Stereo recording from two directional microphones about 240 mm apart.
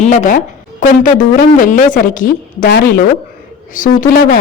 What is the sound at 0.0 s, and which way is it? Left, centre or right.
A woman's voice, left.